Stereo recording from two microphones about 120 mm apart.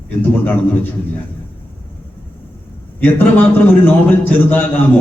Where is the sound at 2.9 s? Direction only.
15° left (ahead or behind).